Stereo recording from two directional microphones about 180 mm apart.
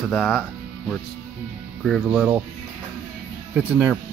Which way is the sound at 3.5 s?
10° right (ahead or behind).